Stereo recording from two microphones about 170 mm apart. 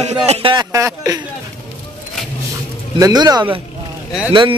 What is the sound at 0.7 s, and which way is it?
Speech, 20° right (ahead or behind).